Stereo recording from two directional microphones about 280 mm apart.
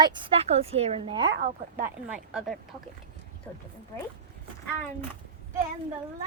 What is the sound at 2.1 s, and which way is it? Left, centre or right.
Speech, centre.